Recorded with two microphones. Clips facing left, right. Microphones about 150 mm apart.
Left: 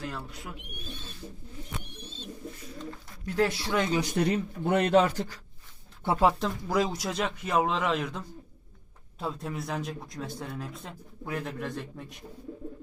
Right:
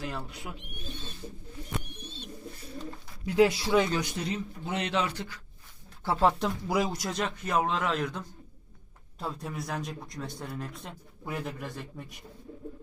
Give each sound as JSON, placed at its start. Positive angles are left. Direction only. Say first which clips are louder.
{"t": 0.0, "sound": "speech", "louder": "right 1 dB", "side_deg": -5}
{"t": 2.0, "sound": "bird", "louder": "left 1 dB", "side_deg": -60}
{"t": 3.2, "sound": "speech", "louder": "right 4 dB", "side_deg": -10}
{"t": 4.1, "sound": "speech", "louder": "left 7 dB", "side_deg": 60}
{"t": 6.1, "sound": "speech", "louder": "left 1 dB", "side_deg": 15}
{"t": 6.4, "sound": "a man's voice", "louder": "left 1 dB", "side_deg": -5}